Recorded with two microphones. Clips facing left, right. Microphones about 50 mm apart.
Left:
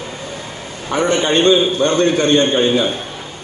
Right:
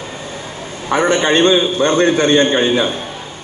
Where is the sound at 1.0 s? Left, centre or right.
Right.